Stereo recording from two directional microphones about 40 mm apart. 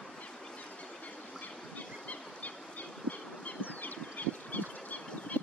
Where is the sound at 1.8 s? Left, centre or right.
Left.